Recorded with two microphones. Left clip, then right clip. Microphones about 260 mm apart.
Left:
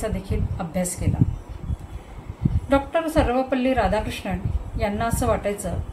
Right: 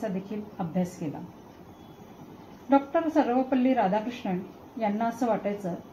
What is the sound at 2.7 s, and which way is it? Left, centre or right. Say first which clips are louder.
A woman's voice: left 3 dB; left.